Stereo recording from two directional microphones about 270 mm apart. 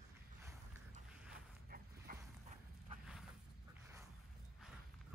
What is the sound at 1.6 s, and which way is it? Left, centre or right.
Dog, right.